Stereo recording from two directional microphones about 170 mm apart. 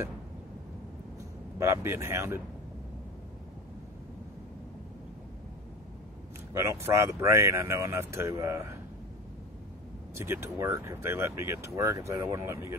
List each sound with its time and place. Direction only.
1.6 s speech: 15° right (ahead or behind)
6.5 s speech: 15° right (ahead or behind)
10.1 s speech: 15° right (ahead or behind)